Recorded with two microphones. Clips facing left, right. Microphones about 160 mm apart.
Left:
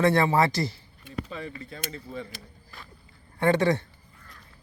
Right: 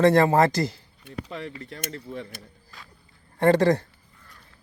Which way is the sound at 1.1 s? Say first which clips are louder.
Right 1 dB; 75° right (ahead or behind).